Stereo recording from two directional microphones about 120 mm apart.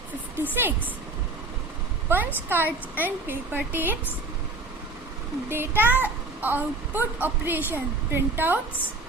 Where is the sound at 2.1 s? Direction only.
20° right (ahead or behind).